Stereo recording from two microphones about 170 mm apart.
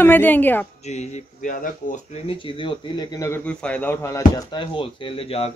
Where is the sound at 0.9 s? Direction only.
40° left (ahead or behind); by 4.2 s 15° left (ahead or behind).